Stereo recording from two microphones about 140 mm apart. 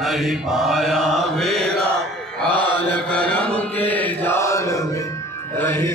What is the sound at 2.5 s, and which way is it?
Mantra, 35° right (ahead or behind).